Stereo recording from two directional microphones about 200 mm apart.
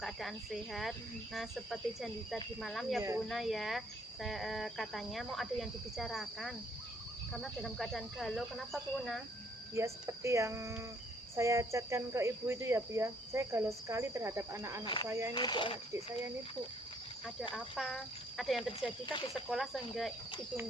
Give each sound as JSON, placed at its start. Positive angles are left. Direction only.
{"t": 0.0, "sound": "speech", "side_deg": 0}
{"t": 9.7, "sound": "speech", "side_deg": -15}
{"t": 15.3, "sound": "speech", "side_deg": 25}
{"t": 17.5, "sound": "speech", "side_deg": 0}